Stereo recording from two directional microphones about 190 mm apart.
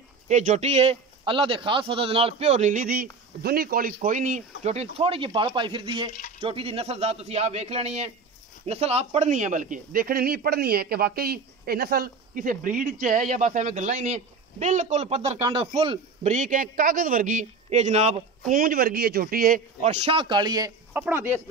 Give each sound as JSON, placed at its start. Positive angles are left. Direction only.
{"t": 0.3, "sound": "a man's voice", "side_deg": -40}
{"t": 18.5, "sound": "a man's voice", "side_deg": -50}